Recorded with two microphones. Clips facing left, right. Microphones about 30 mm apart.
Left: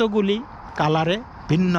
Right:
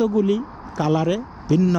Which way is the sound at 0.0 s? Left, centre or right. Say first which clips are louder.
Even; left.